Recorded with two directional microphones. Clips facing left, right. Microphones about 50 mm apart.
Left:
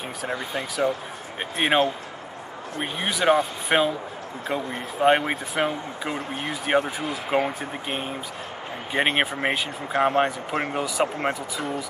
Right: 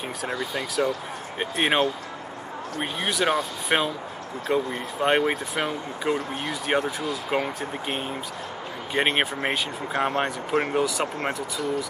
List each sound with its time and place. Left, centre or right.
0.3 s speech: left
1.4 s speech: centre
3.1 s speech: centre